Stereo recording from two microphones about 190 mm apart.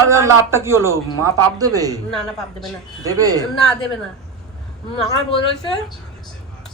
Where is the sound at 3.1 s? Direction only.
20° right (ahead or behind).